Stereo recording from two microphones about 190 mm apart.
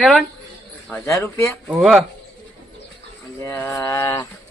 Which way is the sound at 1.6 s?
5° right (ahead or behind).